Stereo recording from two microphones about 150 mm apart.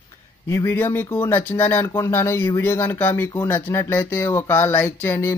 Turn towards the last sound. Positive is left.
turn(degrees=15)  # may be behind; listen again after turning